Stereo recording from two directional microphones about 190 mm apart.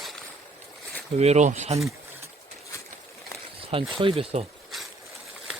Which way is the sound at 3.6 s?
30° right (ahead or behind).